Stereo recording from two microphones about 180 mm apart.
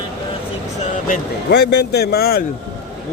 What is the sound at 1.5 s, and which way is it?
Speech, 65° left (ahead or behind).